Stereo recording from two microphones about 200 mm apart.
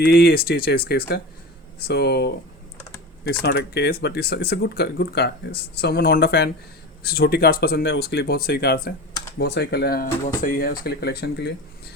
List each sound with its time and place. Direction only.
0.0 s speech: 50° left (ahead or behind)
3.4 s speech: 55° left (ahead or behind)